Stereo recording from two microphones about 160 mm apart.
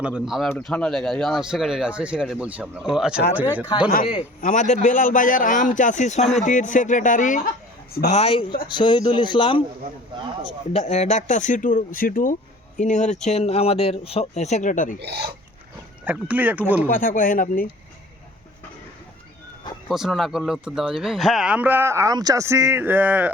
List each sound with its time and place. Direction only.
0.0 s speech: 5° right (ahead or behind)
4.0 s speech: 35° left (ahead or behind)
4.4 s speech: 50° left (ahead or behind)
8.1 s speech: 35° left (ahead or behind)
10.7 s speech: 40° left (ahead or behind)
15.0 s speech: 90° right
16.0 s speech: 10° right (ahead or behind)
16.8 s speech: 60° left (ahead or behind)
19.9 s speech: centre (ahead or behind)